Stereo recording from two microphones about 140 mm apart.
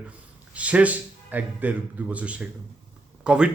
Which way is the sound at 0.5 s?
10° right (ahead or behind).